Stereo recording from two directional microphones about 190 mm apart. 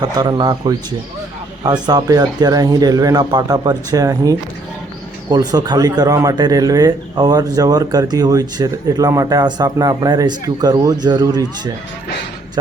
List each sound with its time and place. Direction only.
0.0 s a man's voice: 20° right (ahead or behind)